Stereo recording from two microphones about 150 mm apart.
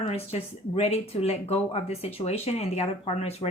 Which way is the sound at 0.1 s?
45° left (ahead or behind).